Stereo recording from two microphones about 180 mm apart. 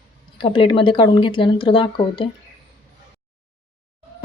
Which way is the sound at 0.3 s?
30° left (ahead or behind).